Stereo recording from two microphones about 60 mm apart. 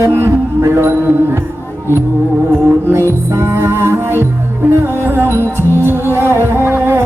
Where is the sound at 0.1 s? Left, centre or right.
Right.